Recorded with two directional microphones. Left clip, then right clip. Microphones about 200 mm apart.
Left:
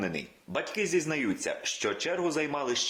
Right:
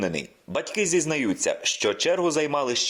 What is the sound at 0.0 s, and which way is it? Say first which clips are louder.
Speech: right 6 dB; 40° right (ahead or behind).